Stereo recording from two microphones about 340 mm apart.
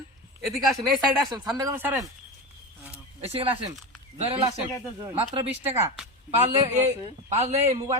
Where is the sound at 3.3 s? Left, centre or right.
Centre.